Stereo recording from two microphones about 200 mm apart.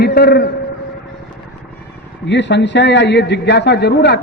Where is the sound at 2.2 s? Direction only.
60° left (ahead or behind).